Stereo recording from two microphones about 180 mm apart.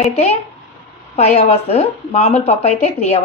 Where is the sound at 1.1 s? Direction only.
35° left (ahead or behind).